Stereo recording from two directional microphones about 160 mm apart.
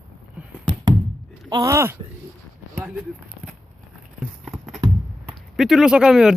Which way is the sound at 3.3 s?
55° right (ahead or behind).